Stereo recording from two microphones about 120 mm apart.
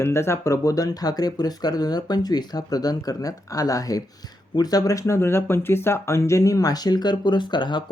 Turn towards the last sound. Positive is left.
turn(degrees=40)  # may be behind; listen again after turning